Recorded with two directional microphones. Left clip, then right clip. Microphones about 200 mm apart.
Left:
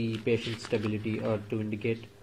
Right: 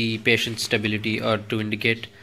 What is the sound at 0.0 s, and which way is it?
Speech, 50° right (ahead or behind).